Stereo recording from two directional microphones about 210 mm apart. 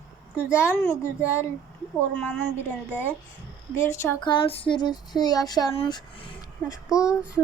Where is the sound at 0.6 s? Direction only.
15° left (ahead or behind).